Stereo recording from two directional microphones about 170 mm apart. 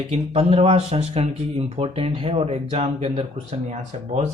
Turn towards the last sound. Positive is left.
turn(degrees=-45)  # may be behind; listen again after turning